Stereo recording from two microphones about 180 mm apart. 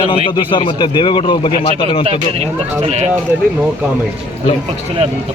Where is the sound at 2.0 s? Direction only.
35° right (ahead or behind).